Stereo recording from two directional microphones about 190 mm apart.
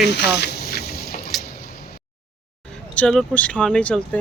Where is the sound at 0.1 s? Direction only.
60° left (ahead or behind).